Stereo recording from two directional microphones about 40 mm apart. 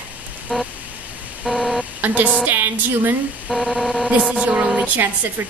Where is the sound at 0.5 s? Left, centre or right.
Centre.